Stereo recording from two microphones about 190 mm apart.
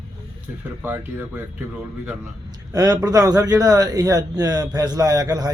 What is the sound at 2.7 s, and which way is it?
Speech, 20° right (ahead or behind).